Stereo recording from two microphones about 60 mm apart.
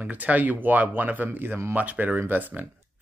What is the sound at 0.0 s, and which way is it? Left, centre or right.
Speech, right.